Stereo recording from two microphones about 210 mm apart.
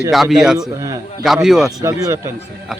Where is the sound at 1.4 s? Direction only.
Centre (ahead or behind).